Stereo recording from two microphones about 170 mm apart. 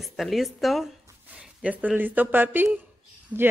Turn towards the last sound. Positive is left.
turn(degrees=-10)  # may be behind; listen again after turning